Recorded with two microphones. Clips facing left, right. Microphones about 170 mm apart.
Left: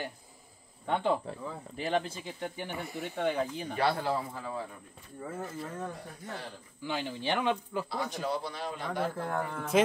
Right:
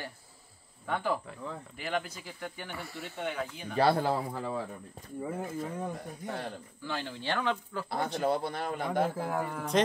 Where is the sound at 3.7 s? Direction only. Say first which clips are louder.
Right 5 dB; 35° right (ahead or behind).